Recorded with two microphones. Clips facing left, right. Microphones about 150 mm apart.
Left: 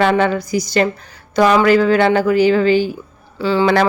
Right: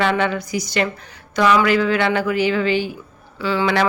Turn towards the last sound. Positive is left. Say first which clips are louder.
# left 5 dB
turn(degrees=35)  # may be behind; listen again after turning